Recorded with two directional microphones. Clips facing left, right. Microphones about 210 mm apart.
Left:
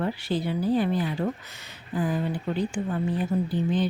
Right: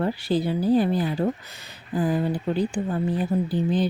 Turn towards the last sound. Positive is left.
turn(degrees=-35)  # may be behind; listen again after turning